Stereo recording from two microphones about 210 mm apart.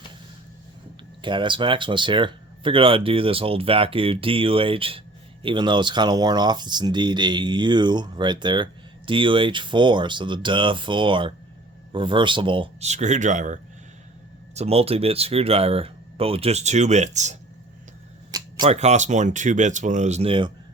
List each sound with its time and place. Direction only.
1.2 s speech: 25° right (ahead or behind)
18.3 s camera: 20° right (ahead or behind)
18.7 s speech: 30° right (ahead or behind)